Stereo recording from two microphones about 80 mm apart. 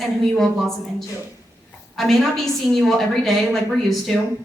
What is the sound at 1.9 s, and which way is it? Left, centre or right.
A woman's voice, centre.